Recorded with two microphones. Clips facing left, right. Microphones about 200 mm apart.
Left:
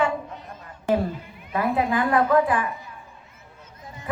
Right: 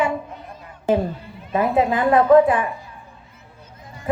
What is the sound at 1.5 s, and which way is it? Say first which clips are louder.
A woman's voice: right 4 dB; 25° right (ahead or behind).